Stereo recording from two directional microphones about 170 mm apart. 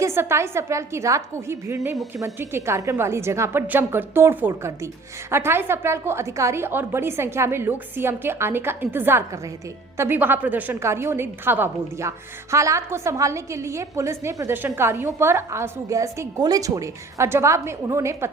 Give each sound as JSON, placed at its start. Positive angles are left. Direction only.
{"t": 0.0, "sound": "a woman's voice", "side_deg": -15}